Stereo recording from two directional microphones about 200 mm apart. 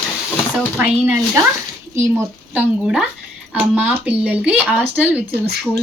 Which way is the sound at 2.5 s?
5° right (ahead or behind).